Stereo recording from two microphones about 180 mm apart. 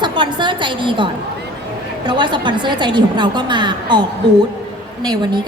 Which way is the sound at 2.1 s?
25° right (ahead or behind).